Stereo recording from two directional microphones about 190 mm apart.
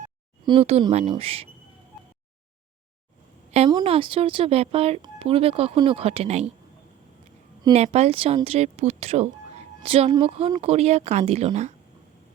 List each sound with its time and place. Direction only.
0.4 s speech: 30° right (ahead or behind)
3.7 s speech: 25° right (ahead or behind)
7.7 s speech: 35° right (ahead or behind)